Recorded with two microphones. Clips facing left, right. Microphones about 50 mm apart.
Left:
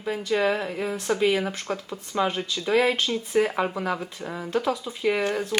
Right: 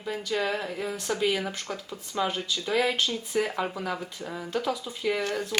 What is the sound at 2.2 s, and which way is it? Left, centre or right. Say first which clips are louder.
A woman's voice: left 2 dB; centre.